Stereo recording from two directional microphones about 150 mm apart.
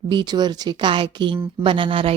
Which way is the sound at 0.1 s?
30° right (ahead or behind).